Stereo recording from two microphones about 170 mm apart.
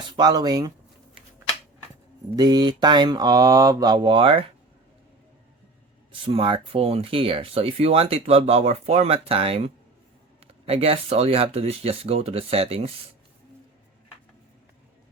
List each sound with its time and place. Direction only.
0.0 s speech: 25° right (ahead or behind)
2.3 s speech: 25° right (ahead or behind)
6.1 s speech: 30° right (ahead or behind)